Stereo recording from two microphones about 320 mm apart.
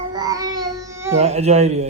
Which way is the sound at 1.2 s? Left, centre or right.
Centre.